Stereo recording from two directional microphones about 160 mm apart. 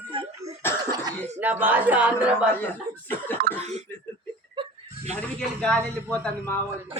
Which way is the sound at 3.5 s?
70° right (ahead or behind).